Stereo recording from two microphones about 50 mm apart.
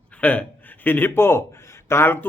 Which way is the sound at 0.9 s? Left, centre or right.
Left.